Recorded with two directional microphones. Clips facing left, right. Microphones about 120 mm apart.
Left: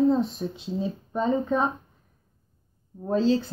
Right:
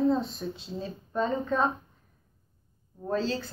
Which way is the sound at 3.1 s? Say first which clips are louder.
Left 7 dB; 20° left (ahead or behind).